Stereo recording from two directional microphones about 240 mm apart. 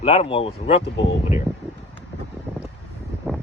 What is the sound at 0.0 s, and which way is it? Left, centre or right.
Speech, left.